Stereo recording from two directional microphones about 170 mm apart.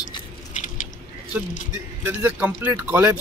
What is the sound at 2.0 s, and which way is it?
Speech, 10° right (ahead or behind).